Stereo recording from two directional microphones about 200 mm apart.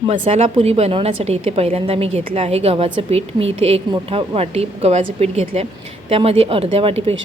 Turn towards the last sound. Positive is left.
turn(degrees=-30)  # may be behind; listen again after turning